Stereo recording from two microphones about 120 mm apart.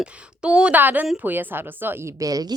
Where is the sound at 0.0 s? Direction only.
10° right (ahead or behind).